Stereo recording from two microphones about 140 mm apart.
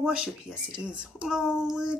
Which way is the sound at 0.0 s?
5° right (ahead or behind).